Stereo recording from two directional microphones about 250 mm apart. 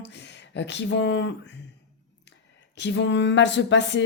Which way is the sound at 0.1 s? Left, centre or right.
Left.